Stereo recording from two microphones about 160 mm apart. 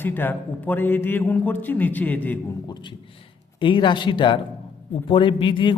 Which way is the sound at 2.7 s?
30° left (ahead or behind).